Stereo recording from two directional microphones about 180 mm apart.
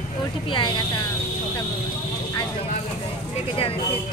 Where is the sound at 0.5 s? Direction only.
25° left (ahead or behind).